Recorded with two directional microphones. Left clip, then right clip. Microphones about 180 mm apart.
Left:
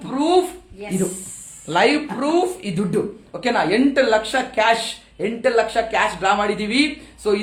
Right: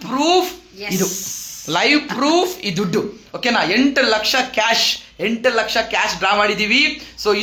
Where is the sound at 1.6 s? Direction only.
25° right (ahead or behind).